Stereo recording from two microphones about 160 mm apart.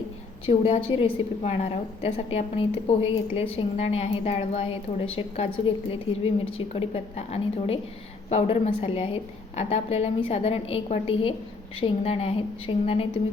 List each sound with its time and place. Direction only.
0.4 s a woman's voice: 35° left (ahead or behind)